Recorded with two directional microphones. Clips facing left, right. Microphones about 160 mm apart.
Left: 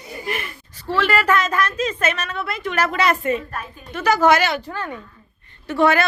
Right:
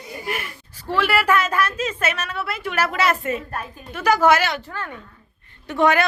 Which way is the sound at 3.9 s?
10° right (ahead or behind).